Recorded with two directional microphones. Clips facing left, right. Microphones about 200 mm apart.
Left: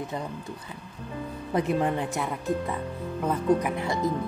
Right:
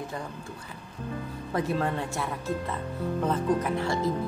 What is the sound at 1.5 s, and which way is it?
Speech, 20° left (ahead or behind).